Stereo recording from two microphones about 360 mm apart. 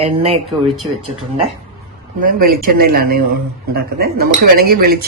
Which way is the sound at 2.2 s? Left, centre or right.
Right.